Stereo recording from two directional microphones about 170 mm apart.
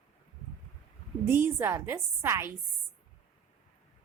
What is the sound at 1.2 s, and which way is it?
A woman's voice, 15° right (ahead or behind).